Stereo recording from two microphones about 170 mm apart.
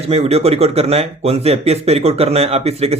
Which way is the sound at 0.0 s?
35° right (ahead or behind).